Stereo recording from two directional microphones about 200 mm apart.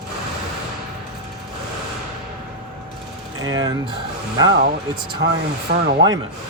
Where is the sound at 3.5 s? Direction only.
20° right (ahead or behind).